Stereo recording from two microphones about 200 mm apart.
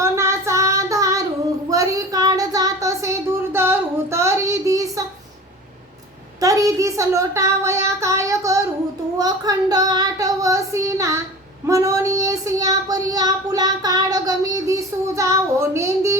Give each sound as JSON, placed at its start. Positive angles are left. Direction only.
{"t": 0.0, "sound": "child singing", "side_deg": -15}
{"t": 1.7, "sound": "a sound", "side_deg": -15}
{"t": 6.4, "sound": "speech", "side_deg": -15}
{"t": 9.1, "sound": "child singing", "side_deg": -20}